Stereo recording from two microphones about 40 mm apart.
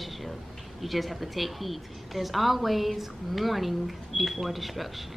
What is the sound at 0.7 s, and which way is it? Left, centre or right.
A woman's voice, centre.